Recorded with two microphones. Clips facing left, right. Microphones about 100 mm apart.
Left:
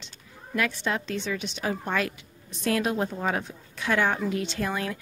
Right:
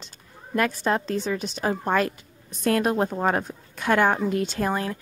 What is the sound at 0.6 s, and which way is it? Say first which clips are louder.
A woman's voice: right 5 dB; 40° right (ahead or behind).